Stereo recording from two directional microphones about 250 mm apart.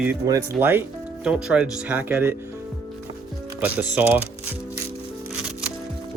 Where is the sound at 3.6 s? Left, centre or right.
Centre.